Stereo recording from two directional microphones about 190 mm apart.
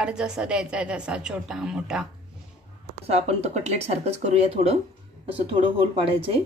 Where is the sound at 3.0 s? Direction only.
35° right (ahead or behind).